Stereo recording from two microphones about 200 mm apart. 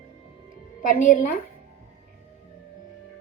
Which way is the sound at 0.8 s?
40° left (ahead or behind).